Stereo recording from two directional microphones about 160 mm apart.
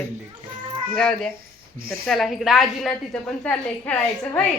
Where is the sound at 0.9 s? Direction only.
5° left (ahead or behind).